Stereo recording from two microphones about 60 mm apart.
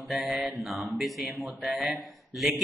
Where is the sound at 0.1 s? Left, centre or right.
Centre.